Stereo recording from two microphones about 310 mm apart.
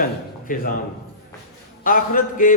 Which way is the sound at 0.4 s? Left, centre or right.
Left.